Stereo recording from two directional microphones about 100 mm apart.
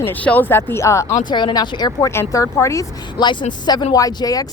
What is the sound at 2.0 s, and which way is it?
Speech, 30° left (ahead or behind).